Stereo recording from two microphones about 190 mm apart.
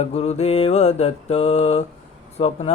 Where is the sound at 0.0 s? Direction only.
35° left (ahead or behind).